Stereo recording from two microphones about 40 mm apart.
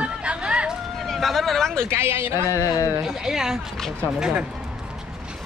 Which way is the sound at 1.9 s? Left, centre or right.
Right.